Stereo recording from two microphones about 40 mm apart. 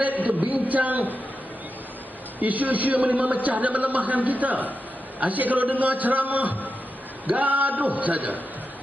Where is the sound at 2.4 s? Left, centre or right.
Right.